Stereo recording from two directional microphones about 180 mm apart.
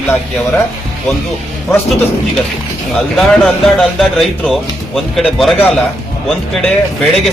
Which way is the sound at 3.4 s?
Centre (ahead or behind).